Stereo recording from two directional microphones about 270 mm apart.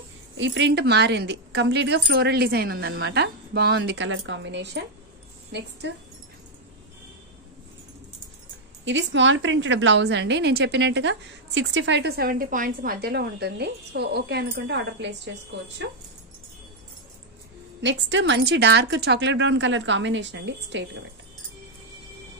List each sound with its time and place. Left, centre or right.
0.4 s a woman's voice: right
8.8 s a woman's voice: right
17.8 s a woman's voice: right